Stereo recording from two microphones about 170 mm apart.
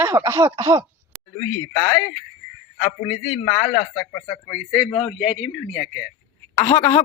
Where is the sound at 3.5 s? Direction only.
25° left (ahead or behind).